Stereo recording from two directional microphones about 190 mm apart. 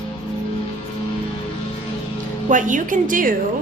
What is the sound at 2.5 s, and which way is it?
Speech, 40° right (ahead or behind).